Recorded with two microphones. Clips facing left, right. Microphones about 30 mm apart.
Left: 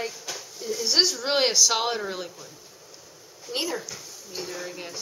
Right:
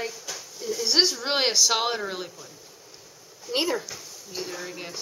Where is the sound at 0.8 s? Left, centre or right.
Centre.